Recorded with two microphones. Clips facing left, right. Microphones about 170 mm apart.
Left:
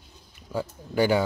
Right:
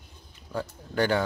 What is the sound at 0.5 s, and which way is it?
Speech, 10° left (ahead or behind).